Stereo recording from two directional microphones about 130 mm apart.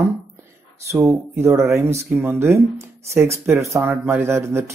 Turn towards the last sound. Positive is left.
turn(degrees=-20)  # may be behind; listen again after turning